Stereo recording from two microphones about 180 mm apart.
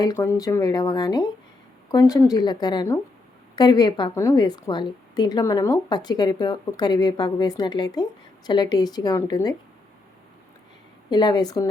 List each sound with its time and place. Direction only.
0.0 s a woman's voice: 20° left (ahead or behind)
11.1 s a woman's voice: 25° left (ahead or behind)